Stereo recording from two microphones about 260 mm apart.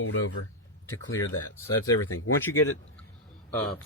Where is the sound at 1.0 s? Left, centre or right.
Left.